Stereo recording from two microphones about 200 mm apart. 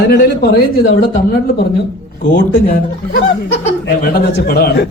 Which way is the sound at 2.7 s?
55° left (ahead or behind).